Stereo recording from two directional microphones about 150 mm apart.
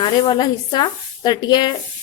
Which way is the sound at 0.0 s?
30° left (ahead or behind).